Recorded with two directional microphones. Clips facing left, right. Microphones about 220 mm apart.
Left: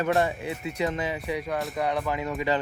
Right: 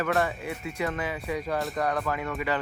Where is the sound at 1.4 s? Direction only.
Centre (ahead or behind).